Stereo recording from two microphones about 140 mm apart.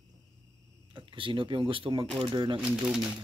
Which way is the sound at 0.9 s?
35° right (ahead or behind).